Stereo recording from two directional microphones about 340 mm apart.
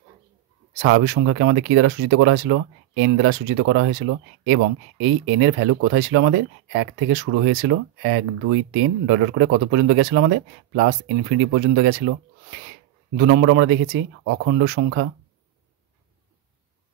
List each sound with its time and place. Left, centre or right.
0.8 s speech: right